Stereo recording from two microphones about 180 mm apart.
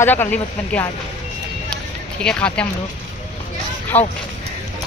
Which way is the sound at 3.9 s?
35° left (ahead or behind).